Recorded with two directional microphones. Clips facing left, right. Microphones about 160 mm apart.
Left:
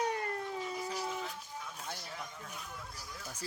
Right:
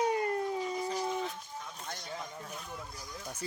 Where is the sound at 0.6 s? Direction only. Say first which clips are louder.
Right 4 dB; 5° left (ahead or behind).